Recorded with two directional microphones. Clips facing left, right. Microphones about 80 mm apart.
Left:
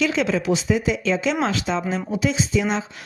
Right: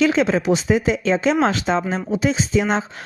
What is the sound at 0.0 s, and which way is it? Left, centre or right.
Speech, right.